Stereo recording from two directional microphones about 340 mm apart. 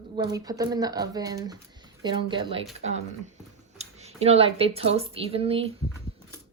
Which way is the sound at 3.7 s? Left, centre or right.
Centre.